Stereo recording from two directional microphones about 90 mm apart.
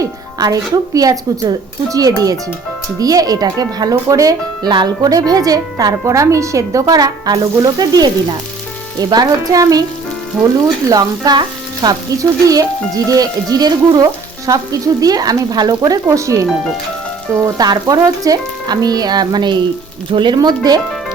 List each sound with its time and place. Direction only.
0.0 s speech: 40° right (ahead or behind)
10.4 s speech: 5° left (ahead or behind)
10.8 s speech: 45° right (ahead or behind)
15.9 s speech: 35° right (ahead or behind)